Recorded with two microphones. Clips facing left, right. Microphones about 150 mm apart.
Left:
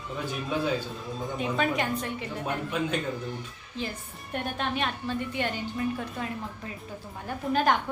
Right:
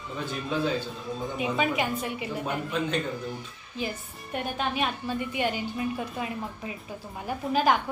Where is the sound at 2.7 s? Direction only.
10° left (ahead or behind).